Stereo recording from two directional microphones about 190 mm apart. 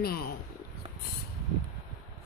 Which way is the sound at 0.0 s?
55° left (ahead or behind).